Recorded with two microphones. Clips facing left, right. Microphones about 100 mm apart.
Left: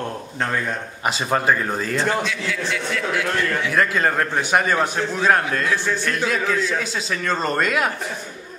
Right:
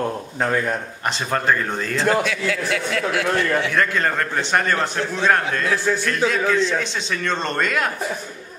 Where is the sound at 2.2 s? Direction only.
50° right (ahead or behind).